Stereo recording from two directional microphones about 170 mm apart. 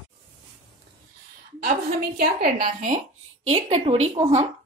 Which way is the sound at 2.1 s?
60° right (ahead or behind).